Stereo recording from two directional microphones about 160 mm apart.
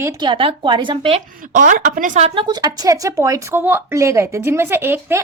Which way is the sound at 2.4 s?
25° right (ahead or behind).